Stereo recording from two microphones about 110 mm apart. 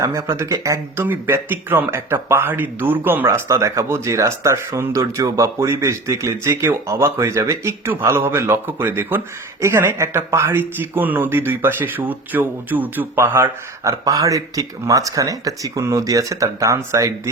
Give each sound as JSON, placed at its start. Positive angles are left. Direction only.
{"t": 0.0, "sound": "speech", "side_deg": -25}
{"t": 1.0, "sound": "speech", "side_deg": -20}